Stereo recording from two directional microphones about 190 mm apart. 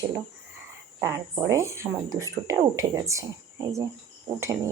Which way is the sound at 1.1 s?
15° right (ahead or behind).